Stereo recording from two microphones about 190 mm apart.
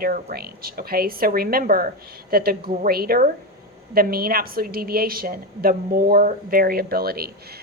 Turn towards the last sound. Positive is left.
turn(degrees=-55)  # may be behind; listen again after turning